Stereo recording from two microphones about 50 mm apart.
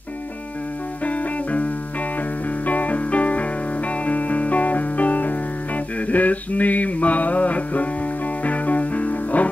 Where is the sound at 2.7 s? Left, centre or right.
Left.